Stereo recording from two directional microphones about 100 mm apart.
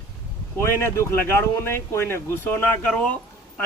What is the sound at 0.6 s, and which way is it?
Speech, 25° left (ahead or behind).